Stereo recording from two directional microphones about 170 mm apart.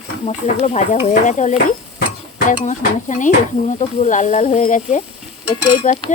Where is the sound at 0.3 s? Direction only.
40° left (ahead or behind).